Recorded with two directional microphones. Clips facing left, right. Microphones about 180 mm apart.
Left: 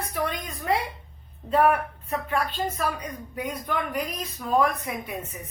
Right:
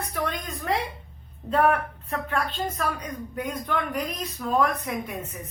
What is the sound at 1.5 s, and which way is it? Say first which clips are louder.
Speech: left 1 dB; 10° left (ahead or behind).